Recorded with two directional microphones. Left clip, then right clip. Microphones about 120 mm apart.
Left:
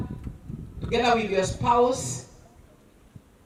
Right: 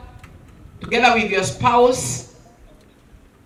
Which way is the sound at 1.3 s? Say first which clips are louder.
Right 6 dB; 40° right (ahead or behind).